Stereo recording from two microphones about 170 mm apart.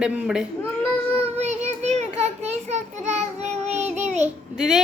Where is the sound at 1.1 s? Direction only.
40° right (ahead or behind).